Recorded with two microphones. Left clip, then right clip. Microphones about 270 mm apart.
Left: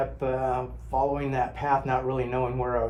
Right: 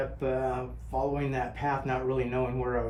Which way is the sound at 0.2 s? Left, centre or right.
Left.